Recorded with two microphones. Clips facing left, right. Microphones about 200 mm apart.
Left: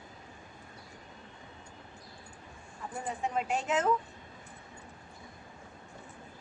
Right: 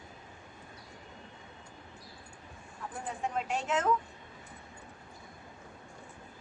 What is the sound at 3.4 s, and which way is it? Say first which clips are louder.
Speech: left 2 dB; 5° left (ahead or behind).